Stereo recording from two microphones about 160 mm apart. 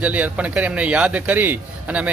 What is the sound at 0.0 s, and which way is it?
A man's voice, 10° right (ahead or behind).